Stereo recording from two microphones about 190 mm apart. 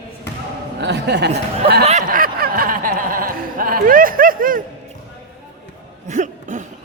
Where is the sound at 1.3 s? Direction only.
30° right (ahead or behind).